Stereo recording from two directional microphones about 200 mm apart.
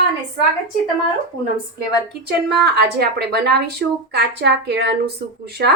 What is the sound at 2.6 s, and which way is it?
A woman's voice, 55° right (ahead or behind).